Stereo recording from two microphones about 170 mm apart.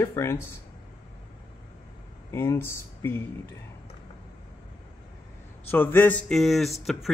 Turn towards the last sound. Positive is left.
turn(degrees=0)  # may be behind; listen again after turning